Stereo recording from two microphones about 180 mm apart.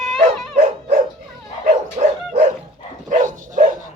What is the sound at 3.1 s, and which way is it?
Dog, 45° right (ahead or behind).